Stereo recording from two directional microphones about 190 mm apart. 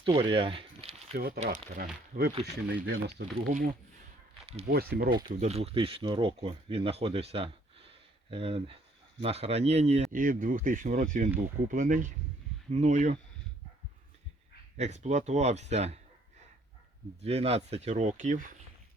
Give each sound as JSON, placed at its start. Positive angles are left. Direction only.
{"t": 0.0, "sound": "a sound", "side_deg": -25}
{"t": 1.1, "sound": "speech", "side_deg": -50}
{"t": 2.8, "sound": "speech", "side_deg": -60}
{"t": 4.7, "sound": "speech", "side_deg": -55}
{"t": 5.4, "sound": "speech", "side_deg": -35}
{"t": 14.8, "sound": "speech", "side_deg": -35}
{"t": 17.2, "sound": "speech", "side_deg": -35}